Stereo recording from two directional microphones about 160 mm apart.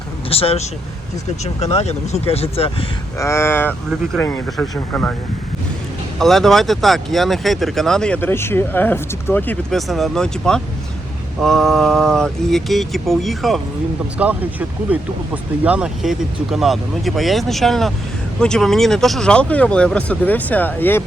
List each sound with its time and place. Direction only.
0.3 s speech: 35° left (ahead or behind)
3.2 s speech: 15° left (ahead or behind)
4.4 s speech: centre (ahead or behind)
4.7 s speech: 15° left (ahead or behind)
6.1 s speech: centre (ahead or behind)